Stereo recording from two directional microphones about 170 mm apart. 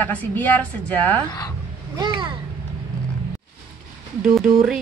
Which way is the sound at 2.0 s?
25° right (ahead or behind).